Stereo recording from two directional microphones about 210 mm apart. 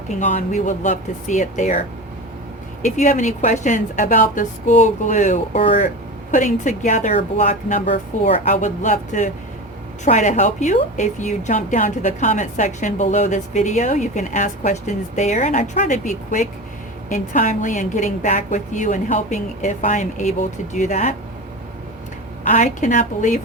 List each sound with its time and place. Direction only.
0.2 s a woman's voice: 35° left (ahead or behind)
2.8 s a woman's voice: 35° left (ahead or behind)
22.4 s a woman's voice: 35° left (ahead or behind)